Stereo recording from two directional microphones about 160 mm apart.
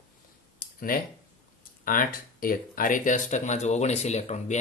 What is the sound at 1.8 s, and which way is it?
Speech, 60° left (ahead or behind).